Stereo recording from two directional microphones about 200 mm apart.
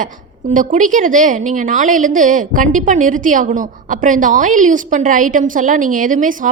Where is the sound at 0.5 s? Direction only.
40° right (ahead or behind).